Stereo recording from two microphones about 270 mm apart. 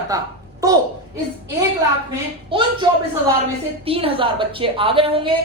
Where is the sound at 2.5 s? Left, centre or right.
Centre.